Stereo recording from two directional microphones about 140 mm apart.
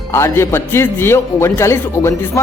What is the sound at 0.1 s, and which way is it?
Speech, 20° left (ahead or behind).